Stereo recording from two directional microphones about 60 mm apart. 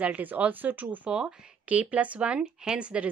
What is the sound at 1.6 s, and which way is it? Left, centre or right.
Speech, right.